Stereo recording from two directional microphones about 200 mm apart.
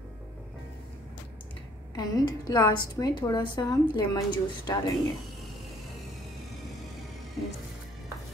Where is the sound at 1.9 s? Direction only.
20° left (ahead or behind).